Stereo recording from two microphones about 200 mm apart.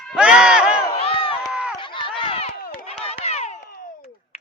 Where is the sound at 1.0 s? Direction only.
30° left (ahead or behind).